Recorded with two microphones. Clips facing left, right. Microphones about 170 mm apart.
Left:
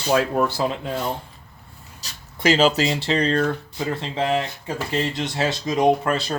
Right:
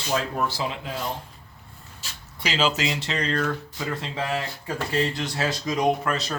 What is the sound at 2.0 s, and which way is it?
Speech, 45° left (ahead or behind).